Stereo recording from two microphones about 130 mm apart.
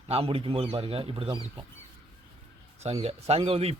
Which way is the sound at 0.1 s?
50° right (ahead or behind).